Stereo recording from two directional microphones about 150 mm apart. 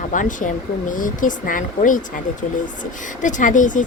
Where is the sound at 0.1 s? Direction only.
60° left (ahead or behind).